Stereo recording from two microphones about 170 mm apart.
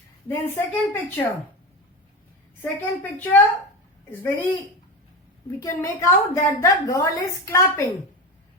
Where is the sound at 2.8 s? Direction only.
10° left (ahead or behind).